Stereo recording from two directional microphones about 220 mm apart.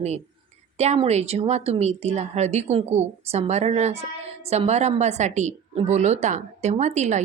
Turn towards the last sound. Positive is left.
turn(degrees=-30)  # may be behind; listen again after turning